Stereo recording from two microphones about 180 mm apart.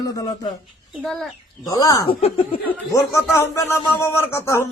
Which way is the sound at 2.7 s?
15° left (ahead or behind).